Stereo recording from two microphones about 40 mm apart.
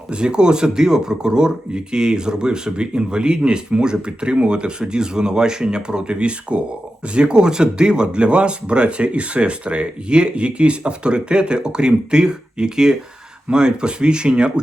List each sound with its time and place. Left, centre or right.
0.1 s speech: right